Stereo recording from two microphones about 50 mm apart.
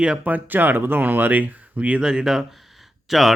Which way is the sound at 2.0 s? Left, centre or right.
Centre.